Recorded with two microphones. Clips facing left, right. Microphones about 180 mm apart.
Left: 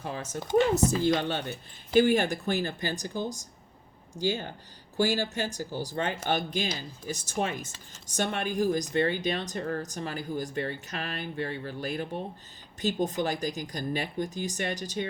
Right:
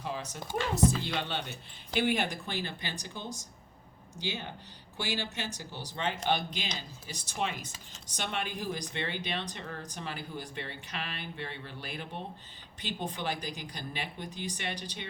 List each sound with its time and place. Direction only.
0.0 s speech: 45° left (ahead or behind)